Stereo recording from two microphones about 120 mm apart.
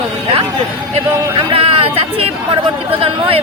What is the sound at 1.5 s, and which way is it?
Speech, 50° right (ahead or behind).